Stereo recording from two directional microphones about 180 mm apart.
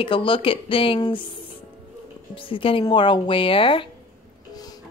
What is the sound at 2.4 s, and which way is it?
A woman's voice, 30° left (ahead or behind).